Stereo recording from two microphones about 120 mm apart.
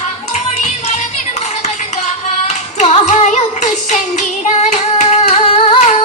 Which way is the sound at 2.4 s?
75° left (ahead or behind).